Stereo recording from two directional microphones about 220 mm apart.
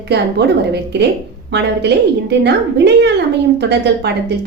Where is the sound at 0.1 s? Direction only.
50° right (ahead or behind).